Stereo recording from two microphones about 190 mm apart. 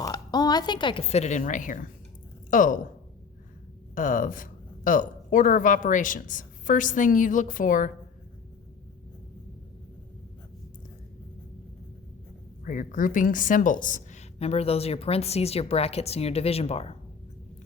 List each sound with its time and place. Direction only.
0.0 s a woman's voice: 20° left (ahead or behind); by 2.7 s 45° left (ahead or behind)
3.9 s speech: 45° left (ahead or behind)
12.6 s a woman's voice: 45° left (ahead or behind)